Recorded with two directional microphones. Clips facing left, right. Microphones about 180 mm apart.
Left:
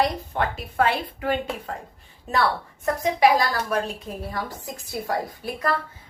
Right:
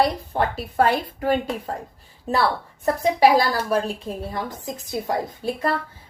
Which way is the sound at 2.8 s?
30° right (ahead or behind).